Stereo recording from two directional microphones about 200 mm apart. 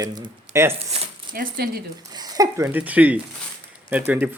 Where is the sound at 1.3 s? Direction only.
45° right (ahead or behind).